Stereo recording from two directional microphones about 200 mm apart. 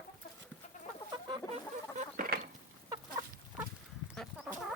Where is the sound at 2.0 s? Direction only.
45° right (ahead or behind).